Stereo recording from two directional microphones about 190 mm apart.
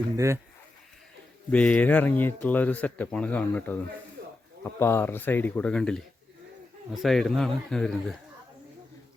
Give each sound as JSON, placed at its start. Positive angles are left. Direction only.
{"t": 1.5, "sound": "speech", "side_deg": 5}
{"t": 4.2, "sound": "a sound", "side_deg": -55}
{"t": 4.6, "sound": "speech", "side_deg": 15}